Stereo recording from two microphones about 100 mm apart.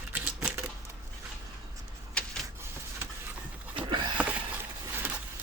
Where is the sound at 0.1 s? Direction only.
20° right (ahead or behind).